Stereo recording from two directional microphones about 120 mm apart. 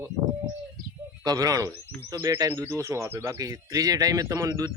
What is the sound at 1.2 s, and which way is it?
Speech, 30° right (ahead or behind).